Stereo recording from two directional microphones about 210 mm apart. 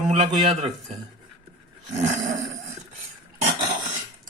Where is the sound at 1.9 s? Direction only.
35° right (ahead or behind).